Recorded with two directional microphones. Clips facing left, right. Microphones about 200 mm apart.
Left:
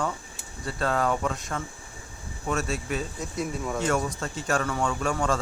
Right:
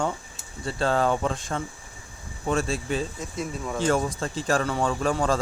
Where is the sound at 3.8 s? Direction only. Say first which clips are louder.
Right 4 dB; 30° right (ahead or behind).